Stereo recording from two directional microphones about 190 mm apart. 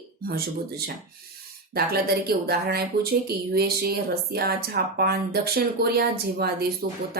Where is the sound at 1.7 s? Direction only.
55° right (ahead or behind).